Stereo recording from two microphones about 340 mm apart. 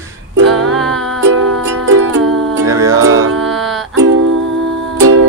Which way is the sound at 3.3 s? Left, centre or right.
Centre.